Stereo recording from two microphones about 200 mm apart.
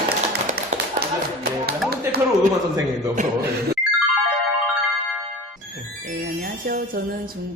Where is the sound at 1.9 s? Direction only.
50° right (ahead or behind).